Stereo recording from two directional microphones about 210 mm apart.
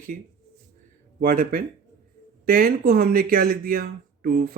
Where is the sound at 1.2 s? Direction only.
40° right (ahead or behind).